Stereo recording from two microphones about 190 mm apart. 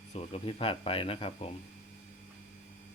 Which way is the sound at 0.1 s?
30° left (ahead or behind).